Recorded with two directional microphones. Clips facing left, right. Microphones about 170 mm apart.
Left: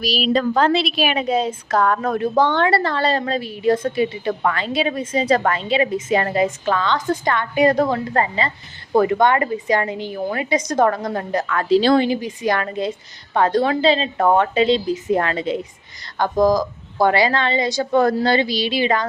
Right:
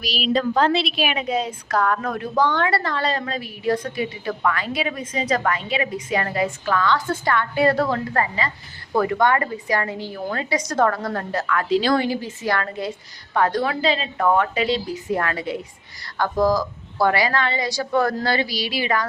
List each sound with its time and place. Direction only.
0.0 s a woman's voice: 35° left (ahead or behind)
0.5 s a woman's voice: 50° left (ahead or behind); by 11.5 s 15° left (ahead or behind)
11.5 s a woman's voice: 30° left (ahead or behind)